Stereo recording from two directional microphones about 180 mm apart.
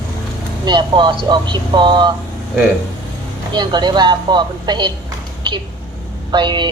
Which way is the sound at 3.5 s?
25° right (ahead or behind).